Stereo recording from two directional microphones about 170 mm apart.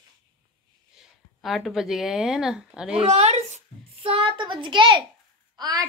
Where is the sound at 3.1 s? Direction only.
40° right (ahead or behind).